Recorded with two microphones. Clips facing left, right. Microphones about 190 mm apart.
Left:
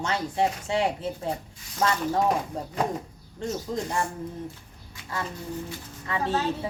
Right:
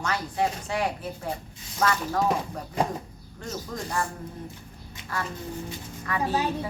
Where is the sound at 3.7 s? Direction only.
20° left (ahead or behind).